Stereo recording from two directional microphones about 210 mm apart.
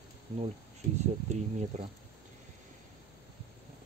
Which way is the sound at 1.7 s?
35° right (ahead or behind).